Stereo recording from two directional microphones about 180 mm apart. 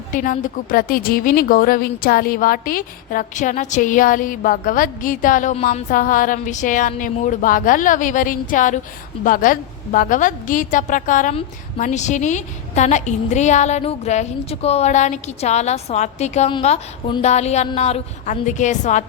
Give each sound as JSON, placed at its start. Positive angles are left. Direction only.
{"t": 0.1, "sound": "a woman's voice", "side_deg": 50}